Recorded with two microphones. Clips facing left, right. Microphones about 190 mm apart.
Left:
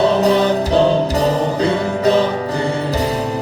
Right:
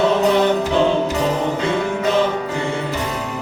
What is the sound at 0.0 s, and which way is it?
Music, 35° left (ahead or behind).